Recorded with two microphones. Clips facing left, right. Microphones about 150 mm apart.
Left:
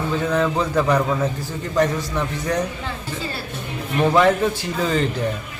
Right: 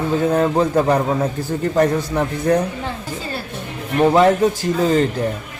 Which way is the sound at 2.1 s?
50° right (ahead or behind).